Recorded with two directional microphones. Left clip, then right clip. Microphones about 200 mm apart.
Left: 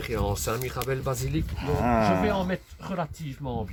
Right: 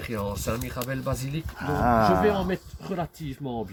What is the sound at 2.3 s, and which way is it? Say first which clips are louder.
Speech: right 1 dB; 20° left (ahead or behind).